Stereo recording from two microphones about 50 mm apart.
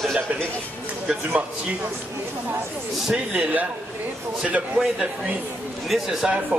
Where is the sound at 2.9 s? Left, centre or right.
Centre.